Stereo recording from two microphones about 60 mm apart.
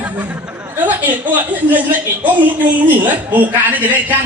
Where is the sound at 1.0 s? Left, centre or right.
Right.